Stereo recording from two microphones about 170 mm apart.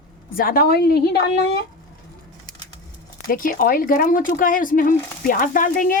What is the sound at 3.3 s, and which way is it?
Speech, 55° left (ahead or behind).